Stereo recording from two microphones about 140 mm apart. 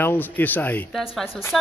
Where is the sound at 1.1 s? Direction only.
Centre (ahead or behind).